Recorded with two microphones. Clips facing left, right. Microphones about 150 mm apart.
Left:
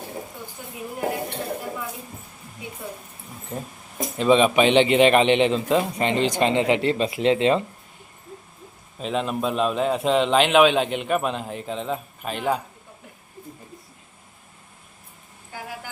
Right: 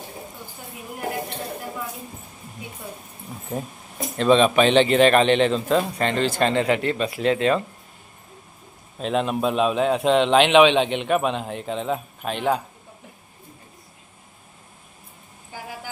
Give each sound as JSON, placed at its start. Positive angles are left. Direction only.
{"t": 4.2, "sound": "a man's voice", "side_deg": 10}
{"t": 9.0, "sound": "a man's voice", "side_deg": 0}